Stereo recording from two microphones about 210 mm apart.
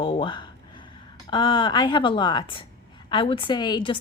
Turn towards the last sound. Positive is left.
turn(degrees=20)  # may be behind; listen again after turning